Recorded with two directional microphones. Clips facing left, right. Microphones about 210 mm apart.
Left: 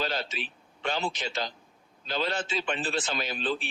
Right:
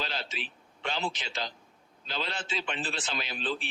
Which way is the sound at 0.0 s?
45° left (ahead or behind).